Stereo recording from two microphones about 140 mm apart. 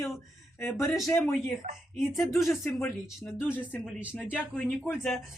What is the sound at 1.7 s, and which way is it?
Speech, 65° right (ahead or behind).